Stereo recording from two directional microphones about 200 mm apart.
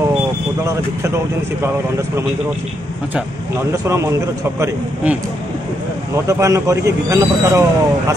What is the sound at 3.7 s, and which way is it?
Speech, 15° right (ahead or behind).